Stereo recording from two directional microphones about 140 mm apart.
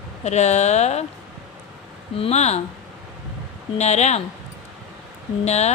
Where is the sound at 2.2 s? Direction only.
50° left (ahead or behind).